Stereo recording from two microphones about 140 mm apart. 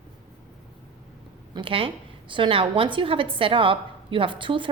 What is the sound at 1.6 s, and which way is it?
A woman's voice, 40° right (ahead or behind).